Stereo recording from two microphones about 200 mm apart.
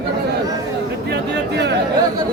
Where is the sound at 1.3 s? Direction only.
55° right (ahead or behind).